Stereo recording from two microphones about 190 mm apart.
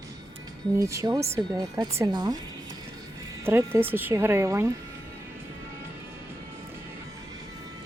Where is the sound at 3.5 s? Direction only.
10° right (ahead or behind).